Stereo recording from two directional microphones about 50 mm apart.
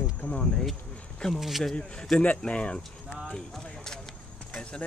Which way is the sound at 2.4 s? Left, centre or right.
Left.